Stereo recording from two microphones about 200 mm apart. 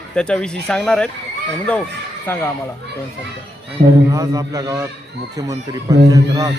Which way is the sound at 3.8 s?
55° right (ahead or behind).